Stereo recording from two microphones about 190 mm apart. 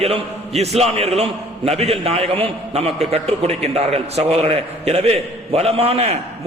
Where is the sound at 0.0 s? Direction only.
35° right (ahead or behind).